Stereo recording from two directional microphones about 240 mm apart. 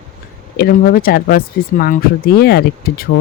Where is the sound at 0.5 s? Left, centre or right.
Left.